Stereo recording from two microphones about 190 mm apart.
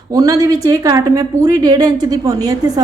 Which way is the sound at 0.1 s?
20° right (ahead or behind).